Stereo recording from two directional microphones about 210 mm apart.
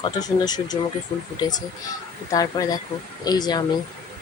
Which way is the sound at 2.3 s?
15° left (ahead or behind).